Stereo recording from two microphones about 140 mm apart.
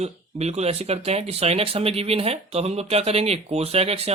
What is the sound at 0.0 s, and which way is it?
Speech, 50° right (ahead or behind).